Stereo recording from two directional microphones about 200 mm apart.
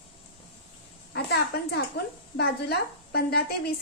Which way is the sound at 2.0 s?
55° left (ahead or behind).